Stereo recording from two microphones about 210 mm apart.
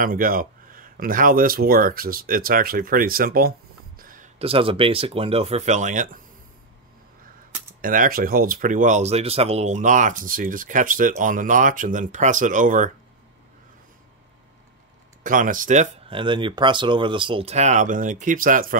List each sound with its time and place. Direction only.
0.0 s speech: 40° right (ahead or behind)
4.0 s a sound: 40° right (ahead or behind)
4.4 s speech: 25° right (ahead or behind)
7.8 s speech: 40° right (ahead or behind)
15.2 s speech: 40° right (ahead or behind)